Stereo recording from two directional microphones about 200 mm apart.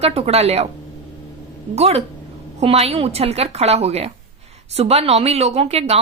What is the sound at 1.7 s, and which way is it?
Speech, 30° right (ahead or behind).